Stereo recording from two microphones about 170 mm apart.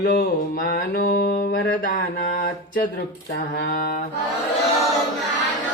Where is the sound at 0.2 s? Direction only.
55° left (ahead or behind).